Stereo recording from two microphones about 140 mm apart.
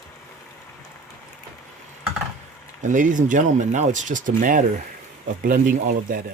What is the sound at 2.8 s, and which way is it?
Speech, 65° right (ahead or behind).